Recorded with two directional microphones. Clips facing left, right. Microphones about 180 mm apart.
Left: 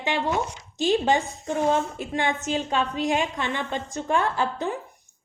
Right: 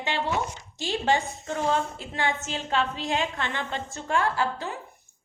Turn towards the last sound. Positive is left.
turn(degrees=20)  # may be behind; listen again after turning